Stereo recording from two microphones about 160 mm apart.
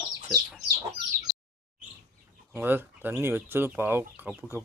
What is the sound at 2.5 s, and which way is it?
Speech, 10° right (ahead or behind).